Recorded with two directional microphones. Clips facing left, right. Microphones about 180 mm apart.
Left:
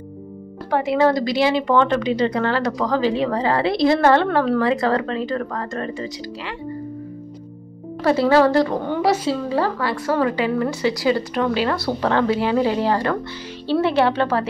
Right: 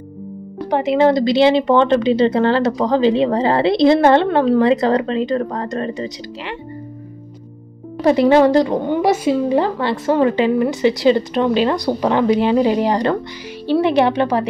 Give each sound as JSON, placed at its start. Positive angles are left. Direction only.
{"t": 0.7, "sound": "speech", "side_deg": -20}
{"t": 8.0, "sound": "a woman's voice", "side_deg": -20}